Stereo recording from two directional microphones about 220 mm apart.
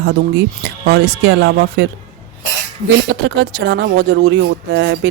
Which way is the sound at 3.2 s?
50° right (ahead or behind).